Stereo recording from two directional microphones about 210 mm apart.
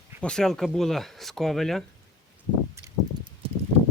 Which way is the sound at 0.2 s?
5° left (ahead or behind).